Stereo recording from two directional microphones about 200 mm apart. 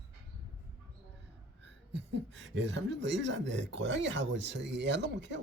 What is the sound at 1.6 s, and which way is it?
Speech, 60° right (ahead or behind).